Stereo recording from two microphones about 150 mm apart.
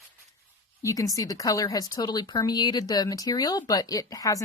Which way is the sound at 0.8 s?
20° left (ahead or behind).